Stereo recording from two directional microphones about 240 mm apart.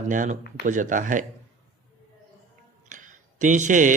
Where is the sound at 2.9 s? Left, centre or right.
Right.